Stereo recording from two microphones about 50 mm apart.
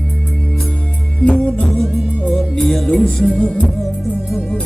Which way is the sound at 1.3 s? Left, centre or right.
Centre.